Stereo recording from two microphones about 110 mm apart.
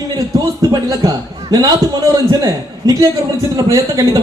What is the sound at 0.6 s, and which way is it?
A man's voice, 30° right (ahead or behind).